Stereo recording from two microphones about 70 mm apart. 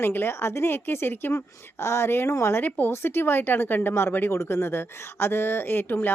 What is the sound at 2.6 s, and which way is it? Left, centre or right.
Speech, left.